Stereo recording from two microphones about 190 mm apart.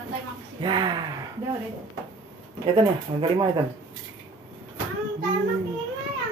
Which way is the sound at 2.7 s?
25° right (ahead or behind).